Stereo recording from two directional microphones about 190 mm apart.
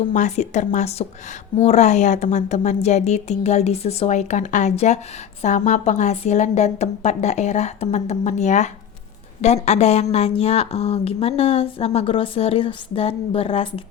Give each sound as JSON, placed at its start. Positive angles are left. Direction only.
{"t": 0.1, "sound": "a woman's voice", "side_deg": 40}